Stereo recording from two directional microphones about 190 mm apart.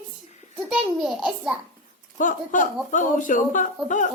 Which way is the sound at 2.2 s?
45° left (ahead or behind).